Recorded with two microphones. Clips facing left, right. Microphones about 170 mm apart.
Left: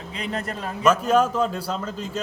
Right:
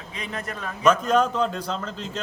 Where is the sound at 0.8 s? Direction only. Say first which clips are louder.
Left 1 dB; 5° left (ahead or behind).